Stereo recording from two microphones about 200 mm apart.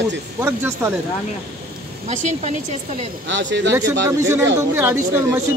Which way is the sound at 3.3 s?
65° right (ahead or behind).